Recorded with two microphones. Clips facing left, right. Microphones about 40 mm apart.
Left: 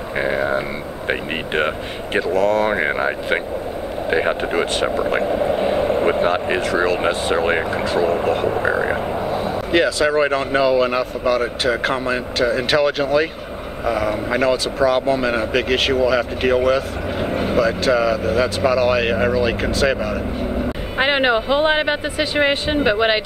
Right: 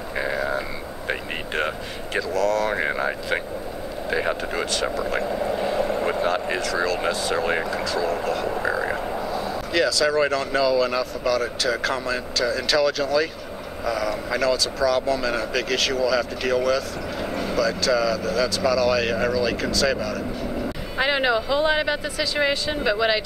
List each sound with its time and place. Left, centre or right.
0.2 s a sound: left
1.0 s a man's voice: left
8.5 s frog: left
9.3 s a man's voice: left